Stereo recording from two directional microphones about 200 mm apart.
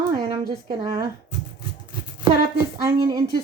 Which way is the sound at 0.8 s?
20° right (ahead or behind).